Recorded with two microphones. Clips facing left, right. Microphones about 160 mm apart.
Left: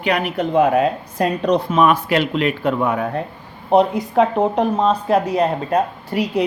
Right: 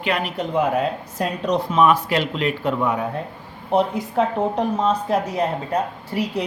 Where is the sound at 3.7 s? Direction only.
75° left (ahead or behind).